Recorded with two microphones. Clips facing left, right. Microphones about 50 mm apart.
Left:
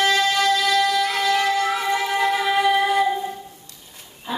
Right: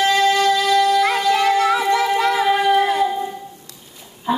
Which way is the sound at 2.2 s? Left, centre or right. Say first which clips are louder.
Right 3 dB; right.